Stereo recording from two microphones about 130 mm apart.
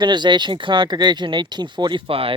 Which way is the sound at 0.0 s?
35° right (ahead or behind).